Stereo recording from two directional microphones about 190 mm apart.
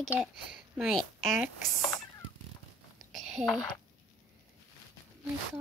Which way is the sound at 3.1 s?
Centre (ahead or behind).